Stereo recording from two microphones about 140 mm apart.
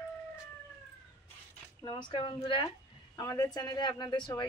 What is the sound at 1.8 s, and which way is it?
Speech, 35° left (ahead or behind).